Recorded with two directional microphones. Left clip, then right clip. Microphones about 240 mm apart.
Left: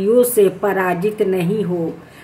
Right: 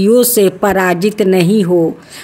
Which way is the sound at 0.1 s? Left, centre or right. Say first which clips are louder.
Right 2 dB; right.